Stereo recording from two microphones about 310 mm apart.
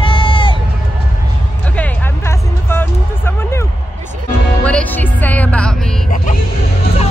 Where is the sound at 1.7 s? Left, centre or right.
Centre.